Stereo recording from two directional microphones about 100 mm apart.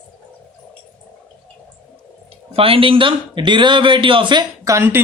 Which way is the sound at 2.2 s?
70° right (ahead or behind).